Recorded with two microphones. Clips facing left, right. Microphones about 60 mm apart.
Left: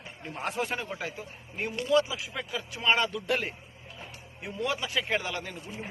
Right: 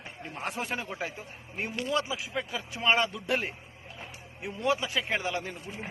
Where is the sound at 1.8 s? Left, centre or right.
Right.